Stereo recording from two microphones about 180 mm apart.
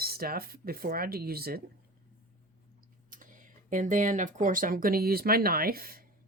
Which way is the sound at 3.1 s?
45° right (ahead or behind).